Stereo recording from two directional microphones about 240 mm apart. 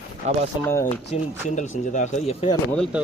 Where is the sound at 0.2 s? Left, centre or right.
Right.